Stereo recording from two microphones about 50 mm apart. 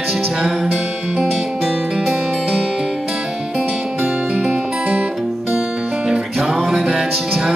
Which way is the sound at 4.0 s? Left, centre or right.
Centre.